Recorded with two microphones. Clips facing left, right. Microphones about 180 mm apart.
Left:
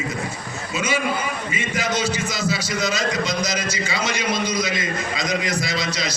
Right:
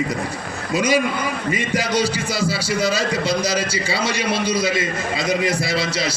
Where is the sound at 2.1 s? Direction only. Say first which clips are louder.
Right 2 dB; 30° right (ahead or behind).